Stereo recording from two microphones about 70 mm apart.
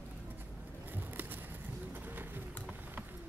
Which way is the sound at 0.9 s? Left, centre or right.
Right.